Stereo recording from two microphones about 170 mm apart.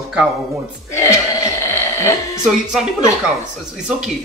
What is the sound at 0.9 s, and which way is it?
Speech, 15° left (ahead or behind).